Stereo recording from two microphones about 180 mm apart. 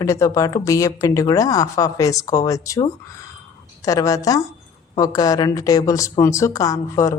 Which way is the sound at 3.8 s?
20° left (ahead or behind).